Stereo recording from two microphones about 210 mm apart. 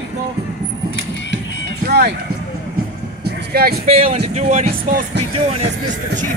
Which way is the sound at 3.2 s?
50° right (ahead or behind).